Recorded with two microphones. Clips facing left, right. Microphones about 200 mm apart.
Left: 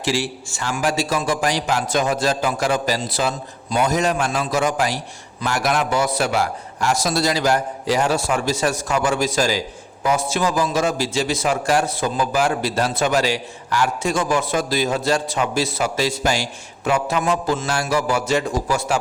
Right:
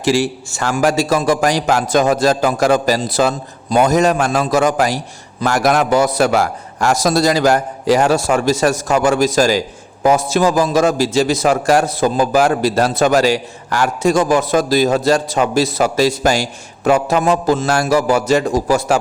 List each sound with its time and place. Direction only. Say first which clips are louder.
0.0 s a man's voice: right 7 dB; 45° right (ahead or behind)